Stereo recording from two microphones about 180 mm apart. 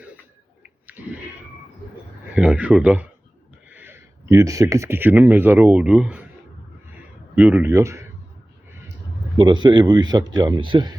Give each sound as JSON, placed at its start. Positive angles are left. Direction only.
{"t": 0.9, "sound": "a sound", "side_deg": -10}
{"t": 2.3, "sound": "speech", "side_deg": -5}
{"t": 7.3, "sound": "speech", "side_deg": -10}
{"t": 9.4, "sound": "speech", "side_deg": -25}